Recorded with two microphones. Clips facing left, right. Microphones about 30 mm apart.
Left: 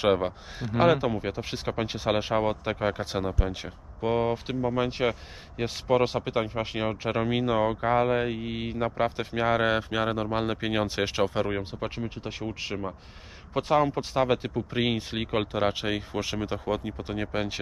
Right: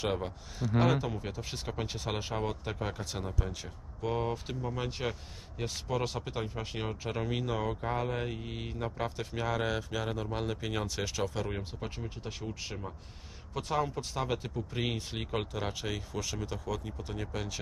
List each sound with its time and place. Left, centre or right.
0.0 s speech: left